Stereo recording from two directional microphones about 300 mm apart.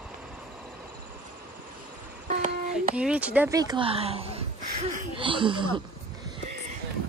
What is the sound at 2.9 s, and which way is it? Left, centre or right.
Speech, centre.